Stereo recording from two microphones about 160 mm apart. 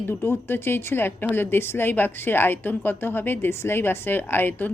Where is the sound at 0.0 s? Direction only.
15° left (ahead or behind).